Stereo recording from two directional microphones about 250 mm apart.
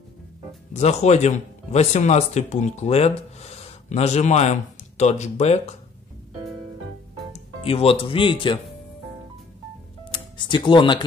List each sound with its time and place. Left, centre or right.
0.7 s speech: left
7.3 s speech: left
10.1 s speech: centre